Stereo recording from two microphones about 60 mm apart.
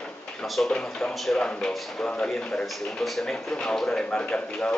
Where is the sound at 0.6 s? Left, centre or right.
Centre.